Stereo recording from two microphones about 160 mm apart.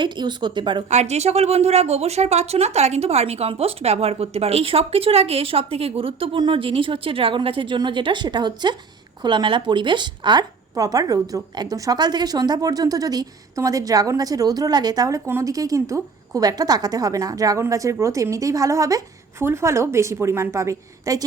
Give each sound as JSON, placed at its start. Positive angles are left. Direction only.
{"t": 0.0, "sound": "speech", "side_deg": -30}
{"t": 0.9, "sound": "speech", "side_deg": -45}